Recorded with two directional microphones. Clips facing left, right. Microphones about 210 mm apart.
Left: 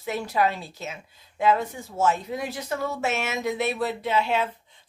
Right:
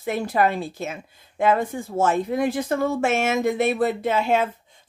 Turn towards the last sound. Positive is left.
turn(degrees=-45)  # may be behind; listen again after turning